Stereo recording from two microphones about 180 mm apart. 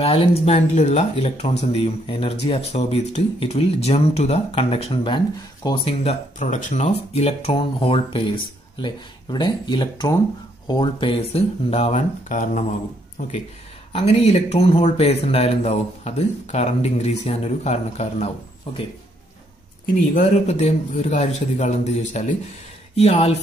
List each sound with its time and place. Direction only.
0.0 s speech: 30° left (ahead or behind)
6.4 s speech: 45° left (ahead or behind)
13.9 s speech: 35° left (ahead or behind)
20.2 s speech: 40° left (ahead or behind)